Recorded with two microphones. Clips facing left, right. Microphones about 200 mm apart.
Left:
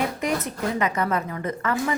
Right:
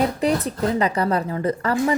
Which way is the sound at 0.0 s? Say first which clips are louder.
Right 5 dB; 35° right (ahead or behind).